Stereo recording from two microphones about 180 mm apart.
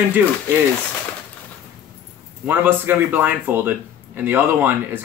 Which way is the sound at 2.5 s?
10° right (ahead or behind).